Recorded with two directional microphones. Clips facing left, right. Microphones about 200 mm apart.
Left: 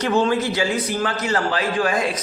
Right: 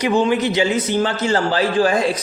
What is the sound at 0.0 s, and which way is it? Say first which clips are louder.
A man's voice: right 2 dB; 15° right (ahead or behind).